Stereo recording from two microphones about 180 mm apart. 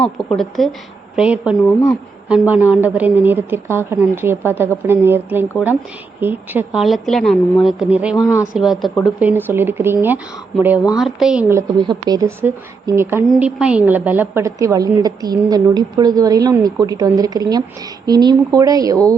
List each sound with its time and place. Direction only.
0.0 s a woman's voice: 5° left (ahead or behind)
11.8 s a woman's voice: 25° right (ahead or behind)